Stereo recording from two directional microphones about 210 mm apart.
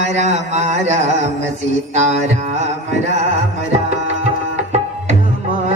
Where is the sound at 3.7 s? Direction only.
30° right (ahead or behind).